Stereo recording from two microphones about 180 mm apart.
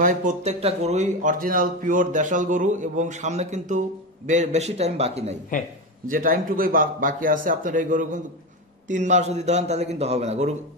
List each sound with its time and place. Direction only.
0.0 s a man's voice: 45° right (ahead or behind)
6.0 s a man's voice: 50° right (ahead or behind)